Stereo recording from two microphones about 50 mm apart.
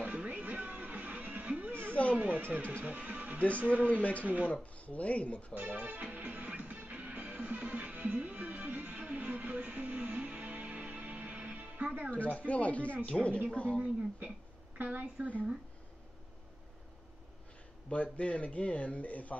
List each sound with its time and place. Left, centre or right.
0.0 s music: right
1.7 s a sound: right
2.1 s speech: right
4.7 s speech: left
5.7 s music: right
12.1 s a man's voice: left
14.2 s speech: right
17.8 s a man's voice: left